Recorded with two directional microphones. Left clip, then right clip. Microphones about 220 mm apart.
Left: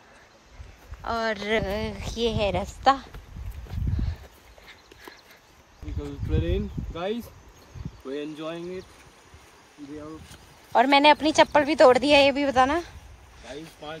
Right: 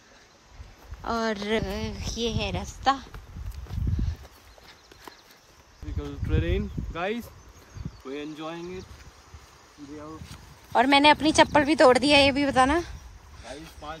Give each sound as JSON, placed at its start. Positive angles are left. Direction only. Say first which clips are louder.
{"t": 1.0, "sound": "speech", "louder": "left 1 dB", "side_deg": -25}
{"t": 3.7, "sound": "horse", "louder": "even", "side_deg": -15}
{"t": 6.0, "sound": "speech", "louder": "even", "side_deg": 0}
{"t": 7.0, "sound": "speech", "louder": "even", "side_deg": -25}
{"t": 10.7, "sound": "speech", "louder": "left 1 dB", "side_deg": -20}